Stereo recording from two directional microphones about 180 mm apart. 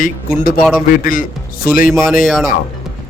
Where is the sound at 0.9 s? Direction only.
50° left (ahead or behind).